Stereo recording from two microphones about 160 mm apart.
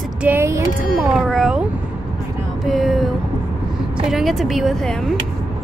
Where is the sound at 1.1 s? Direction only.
5° right (ahead or behind).